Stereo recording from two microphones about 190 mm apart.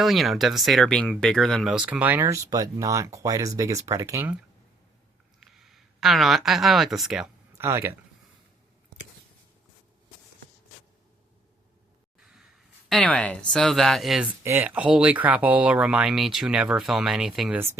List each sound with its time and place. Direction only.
0.0 s speech: centre (ahead or behind)
5.4 s speech: centre (ahead or behind)
7.6 s speech: 15° right (ahead or behind)
12.2 s a sound: 5° right (ahead or behind)
12.9 s speech: 5° left (ahead or behind)
14.4 s speech: 10° right (ahead or behind)